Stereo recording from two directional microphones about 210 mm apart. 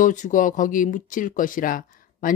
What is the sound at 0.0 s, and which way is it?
Speech, 35° left (ahead or behind).